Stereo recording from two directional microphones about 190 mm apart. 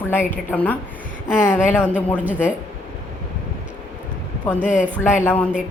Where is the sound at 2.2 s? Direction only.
10° right (ahead or behind).